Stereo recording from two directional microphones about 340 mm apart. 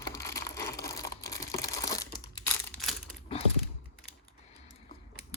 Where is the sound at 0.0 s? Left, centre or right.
Centre.